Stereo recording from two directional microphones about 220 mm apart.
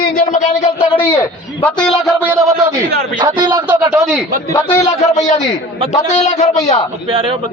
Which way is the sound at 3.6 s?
10° right (ahead or behind).